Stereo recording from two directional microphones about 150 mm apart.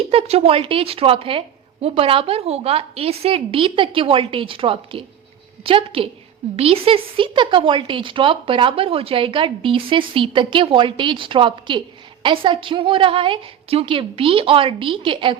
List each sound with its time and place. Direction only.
0.0 s speech: 40° right (ahead or behind)